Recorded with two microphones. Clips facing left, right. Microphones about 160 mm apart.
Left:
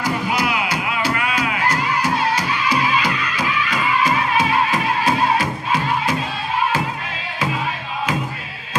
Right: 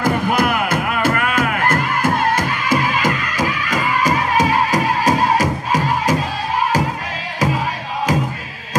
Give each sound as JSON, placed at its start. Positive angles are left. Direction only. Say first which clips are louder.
{"t": 0.0, "sound": "music", "louder": "right 4 dB", "side_deg": -50}
{"t": 7.3, "sound": "music", "louder": "right 4 dB", "side_deg": -40}